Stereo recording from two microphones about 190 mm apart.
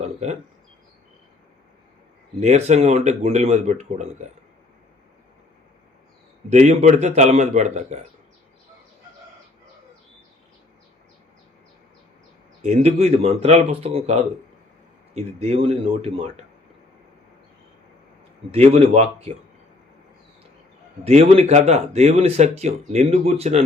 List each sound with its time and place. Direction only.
0.0 s a sound: 35° right (ahead or behind)
2.4 s a man's voice: 35° right (ahead or behind)
6.5 s a man's voice: 35° right (ahead or behind)
12.6 s a man's voice: 35° right (ahead or behind)
18.5 s a man's voice: 35° right (ahead or behind)
21.0 s a man's voice: 35° right (ahead or behind)